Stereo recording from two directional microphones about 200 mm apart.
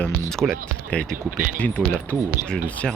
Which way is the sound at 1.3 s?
45° right (ahead or behind).